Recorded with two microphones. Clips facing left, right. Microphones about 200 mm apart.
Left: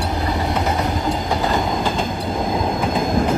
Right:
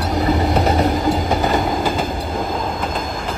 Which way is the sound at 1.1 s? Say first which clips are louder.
Right 3 dB; centre (ahead or behind).